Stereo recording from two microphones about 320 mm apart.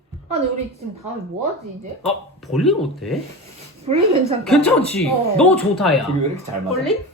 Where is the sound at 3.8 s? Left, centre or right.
Centre.